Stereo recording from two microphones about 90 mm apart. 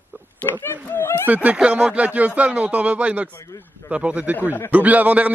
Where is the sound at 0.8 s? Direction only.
25° left (ahead or behind).